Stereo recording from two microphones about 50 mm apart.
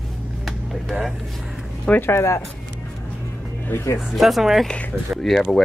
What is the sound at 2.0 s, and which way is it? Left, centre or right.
Speech, left.